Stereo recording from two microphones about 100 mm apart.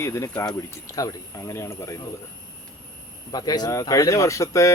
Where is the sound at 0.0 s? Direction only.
30° left (ahead or behind).